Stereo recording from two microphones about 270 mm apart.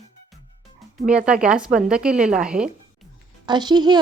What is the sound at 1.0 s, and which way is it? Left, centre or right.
A woman's voice, centre.